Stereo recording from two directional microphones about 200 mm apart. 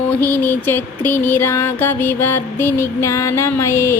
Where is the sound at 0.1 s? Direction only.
10° left (ahead or behind).